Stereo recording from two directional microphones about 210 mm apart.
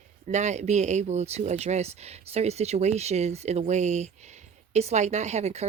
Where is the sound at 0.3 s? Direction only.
35° right (ahead or behind).